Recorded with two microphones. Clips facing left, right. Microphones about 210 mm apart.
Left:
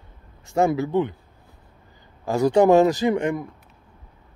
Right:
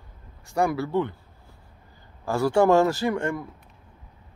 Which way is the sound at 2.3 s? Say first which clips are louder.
Left 3 dB; 20° left (ahead or behind).